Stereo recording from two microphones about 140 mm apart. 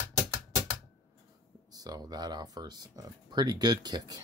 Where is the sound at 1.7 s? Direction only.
25° right (ahead or behind).